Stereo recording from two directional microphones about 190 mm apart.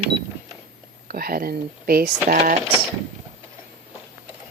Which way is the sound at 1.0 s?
50° right (ahead or behind).